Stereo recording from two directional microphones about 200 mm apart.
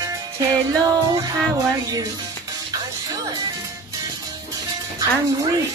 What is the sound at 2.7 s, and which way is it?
Music, 20° right (ahead or behind).